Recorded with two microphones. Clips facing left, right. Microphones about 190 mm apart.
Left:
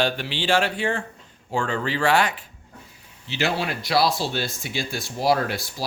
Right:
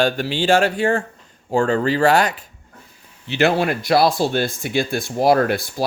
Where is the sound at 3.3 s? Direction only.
55° right (ahead or behind).